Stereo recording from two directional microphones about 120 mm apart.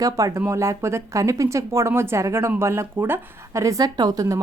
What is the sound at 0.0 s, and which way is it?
A woman's voice, 25° right (ahead or behind).